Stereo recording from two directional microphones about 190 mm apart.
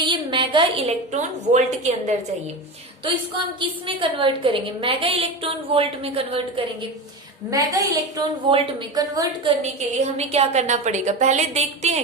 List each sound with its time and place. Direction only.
0.0 s a woman's voice: 25° right (ahead or behind)
3.6 s a woman's voice: 25° right (ahead or behind)
7.5 s a woman's voice: 15° right (ahead or behind)
9.9 s a woman's voice: 35° right (ahead or behind)